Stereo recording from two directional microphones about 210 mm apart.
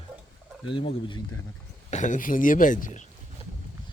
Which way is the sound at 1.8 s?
35° left (ahead or behind).